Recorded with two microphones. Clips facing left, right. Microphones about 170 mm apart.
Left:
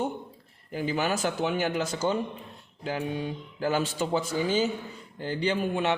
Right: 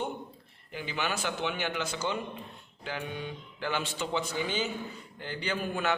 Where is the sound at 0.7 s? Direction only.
40° left (ahead or behind).